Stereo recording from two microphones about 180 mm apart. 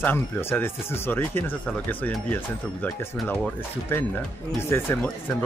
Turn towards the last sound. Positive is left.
turn(degrees=10)  # may be behind; listen again after turning